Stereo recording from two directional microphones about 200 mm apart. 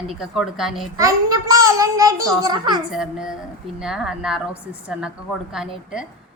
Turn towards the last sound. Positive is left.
turn(degrees=-5)  # may be behind; listen again after turning